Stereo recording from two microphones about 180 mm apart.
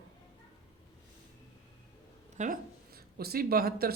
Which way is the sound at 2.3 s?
45° right (ahead or behind).